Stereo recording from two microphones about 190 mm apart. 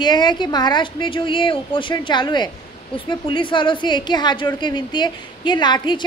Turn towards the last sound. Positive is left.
turn(degrees=25)  # may be behind; listen again after turning